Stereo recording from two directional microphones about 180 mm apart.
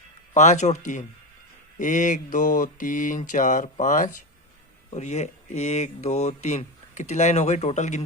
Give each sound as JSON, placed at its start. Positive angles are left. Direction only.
{"t": 0.3, "sound": "speech", "side_deg": 40}
{"t": 1.8, "sound": "mantra", "side_deg": 45}
{"t": 4.9, "sound": "speech", "side_deg": 40}